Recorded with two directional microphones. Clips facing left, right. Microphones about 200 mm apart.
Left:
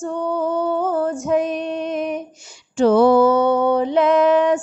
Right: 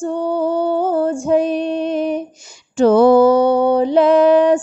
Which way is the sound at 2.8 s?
45° right (ahead or behind).